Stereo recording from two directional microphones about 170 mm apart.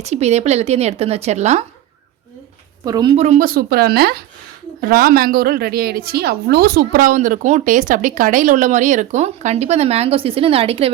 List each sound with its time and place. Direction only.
0.0 s a woman's voice: 40° right (ahead or behind)
2.8 s a woman's voice: 20° right (ahead or behind)
3.2 s a woman's voice: 45° right (ahead or behind)